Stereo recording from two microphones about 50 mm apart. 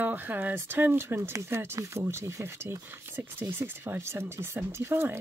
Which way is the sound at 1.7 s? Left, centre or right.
Right.